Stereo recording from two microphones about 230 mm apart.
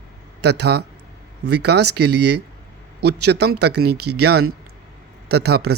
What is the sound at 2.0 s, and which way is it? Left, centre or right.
A man's voice, right.